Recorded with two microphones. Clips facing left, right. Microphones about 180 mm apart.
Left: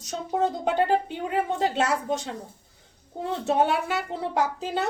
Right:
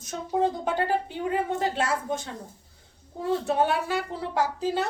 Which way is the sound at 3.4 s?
25° left (ahead or behind).